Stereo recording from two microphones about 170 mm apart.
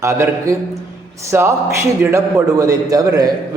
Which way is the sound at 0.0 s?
20° right (ahead or behind).